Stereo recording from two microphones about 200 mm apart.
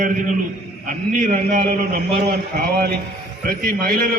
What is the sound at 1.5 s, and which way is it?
Speech, 40° right (ahead or behind).